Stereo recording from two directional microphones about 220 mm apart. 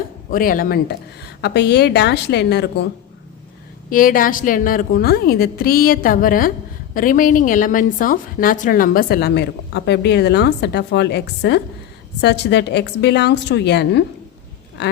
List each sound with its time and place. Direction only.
0.3 s a woman's voice: 40° left (ahead or behind)
3.8 s a woman's voice: 40° left (ahead or behind)